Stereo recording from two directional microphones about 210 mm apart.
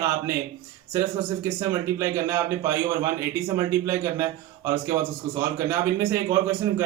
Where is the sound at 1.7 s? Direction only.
15° right (ahead or behind).